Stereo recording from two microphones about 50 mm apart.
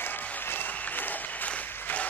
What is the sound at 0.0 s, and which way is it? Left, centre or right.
Applause, left.